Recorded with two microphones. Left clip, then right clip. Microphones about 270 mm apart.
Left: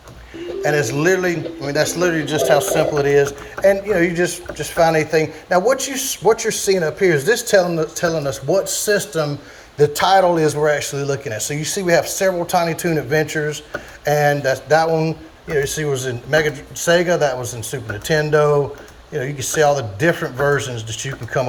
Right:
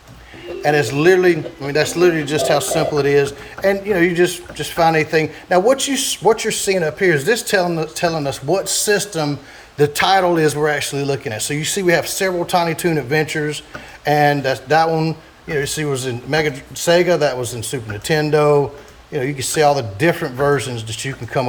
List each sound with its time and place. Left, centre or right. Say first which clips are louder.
0.6 s a man's voice: right 3 dB; right
6.7 s a man's voice: left 1 dB; right
7.0 s a man's voice: right 1 dB; centre